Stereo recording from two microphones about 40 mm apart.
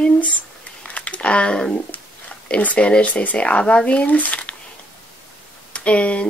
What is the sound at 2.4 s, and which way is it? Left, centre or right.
Speech, left.